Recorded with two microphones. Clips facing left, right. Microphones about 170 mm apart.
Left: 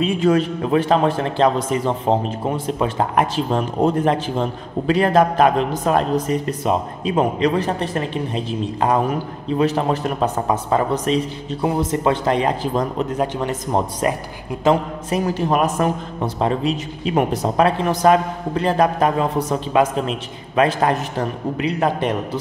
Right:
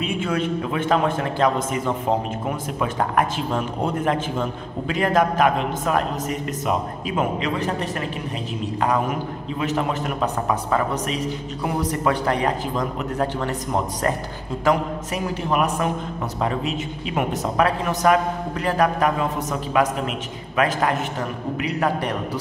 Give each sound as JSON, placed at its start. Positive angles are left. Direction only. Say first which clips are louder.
{"t": 0.0, "sound": "a man's voice", "louder": "left 7 dB", "side_deg": 35}
{"t": 14.6, "sound": "a man's voice", "louder": "left 3 dB", "side_deg": 25}